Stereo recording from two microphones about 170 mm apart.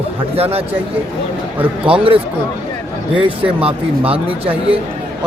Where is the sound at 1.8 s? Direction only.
35° right (ahead or behind).